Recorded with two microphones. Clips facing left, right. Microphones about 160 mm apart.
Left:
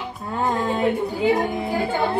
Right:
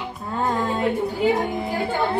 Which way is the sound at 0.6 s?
20° left (ahead or behind).